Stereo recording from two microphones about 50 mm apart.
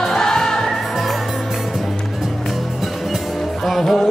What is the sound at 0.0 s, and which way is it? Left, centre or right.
Music, centre.